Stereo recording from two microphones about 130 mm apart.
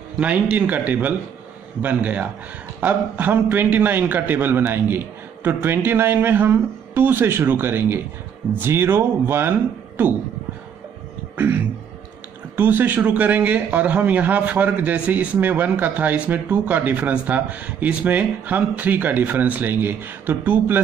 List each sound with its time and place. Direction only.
0.2 s a man's voice: 10° right (ahead or behind)
12.5 s a man's voice: 15° right (ahead or behind)